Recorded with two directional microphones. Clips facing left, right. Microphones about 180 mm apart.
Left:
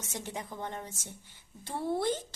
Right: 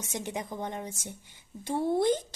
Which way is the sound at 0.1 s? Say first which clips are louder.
Right 5 dB; 15° right (ahead or behind).